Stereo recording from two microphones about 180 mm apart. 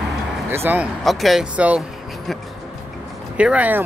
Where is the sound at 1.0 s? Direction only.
Centre (ahead or behind).